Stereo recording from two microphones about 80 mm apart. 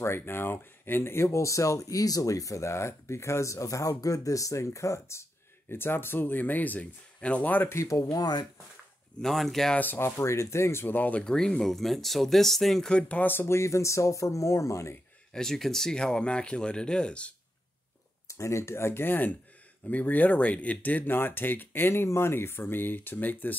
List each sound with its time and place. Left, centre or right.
0.0 s speech: left
7.7 s speech: left
9.2 s speech: centre
9.8 s speech: left
15.3 s speech: centre
18.3 s speech: left